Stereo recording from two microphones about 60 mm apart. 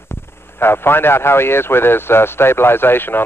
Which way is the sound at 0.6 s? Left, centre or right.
Left.